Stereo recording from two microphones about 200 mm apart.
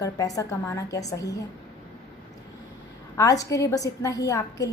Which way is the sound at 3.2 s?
15° left (ahead or behind).